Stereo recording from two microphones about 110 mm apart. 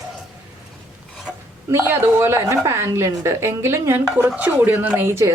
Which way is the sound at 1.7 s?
20° right (ahead or behind).